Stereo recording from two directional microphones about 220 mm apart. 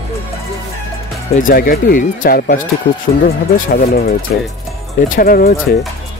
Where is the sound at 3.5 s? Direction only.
45° left (ahead or behind).